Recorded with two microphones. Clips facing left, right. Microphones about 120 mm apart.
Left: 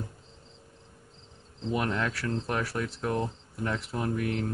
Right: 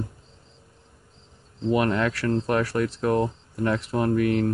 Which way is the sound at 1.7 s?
80° right.